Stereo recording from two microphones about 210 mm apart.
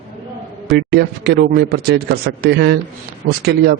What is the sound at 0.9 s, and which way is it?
A man's voice, 50° right (ahead or behind).